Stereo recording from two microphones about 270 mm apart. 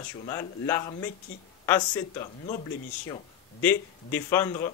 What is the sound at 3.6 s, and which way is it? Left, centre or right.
Speech, centre.